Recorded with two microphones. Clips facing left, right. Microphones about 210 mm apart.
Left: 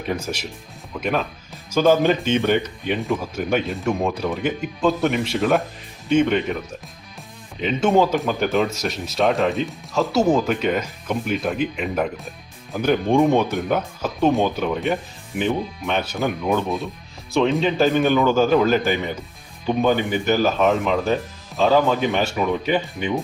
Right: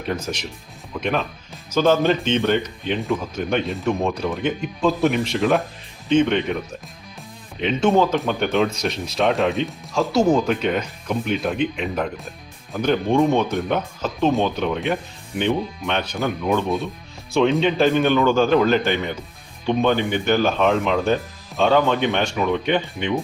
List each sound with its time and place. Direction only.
0.1 s speech: 10° left (ahead or behind)
7.6 s speech: centre (ahead or behind)
13.5 s speech: 5° left (ahead or behind)